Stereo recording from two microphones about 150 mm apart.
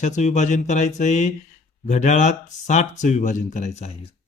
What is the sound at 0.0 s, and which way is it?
Speech, 50° left (ahead or behind).